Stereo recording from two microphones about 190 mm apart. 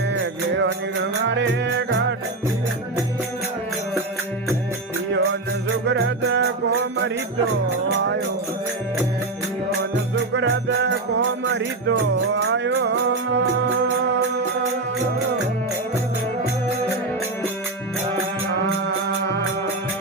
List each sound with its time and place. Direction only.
0.1 s music: 70° right (ahead or behind)
5.8 s music: 70° right (ahead or behind)
10.3 s music: 65° right (ahead or behind)